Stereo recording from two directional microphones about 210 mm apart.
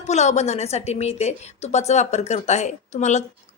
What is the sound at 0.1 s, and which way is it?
A woman's voice, 30° left (ahead or behind).